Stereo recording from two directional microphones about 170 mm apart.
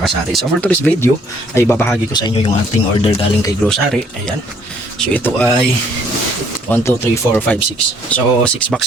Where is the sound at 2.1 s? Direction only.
25° left (ahead or behind).